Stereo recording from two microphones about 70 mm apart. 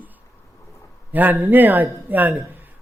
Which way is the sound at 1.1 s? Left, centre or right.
Right.